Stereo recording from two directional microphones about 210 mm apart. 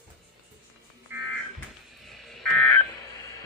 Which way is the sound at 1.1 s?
10° right (ahead or behind).